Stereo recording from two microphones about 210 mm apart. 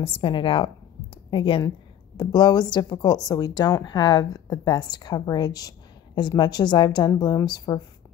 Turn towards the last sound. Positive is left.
turn(degrees=20)  # may be behind; listen again after turning